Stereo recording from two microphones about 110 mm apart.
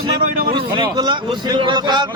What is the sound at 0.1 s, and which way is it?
A man's voice, 45° right (ahead or behind).